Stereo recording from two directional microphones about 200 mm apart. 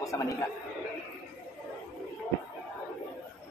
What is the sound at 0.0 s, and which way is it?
Speech, 15° left (ahead or behind).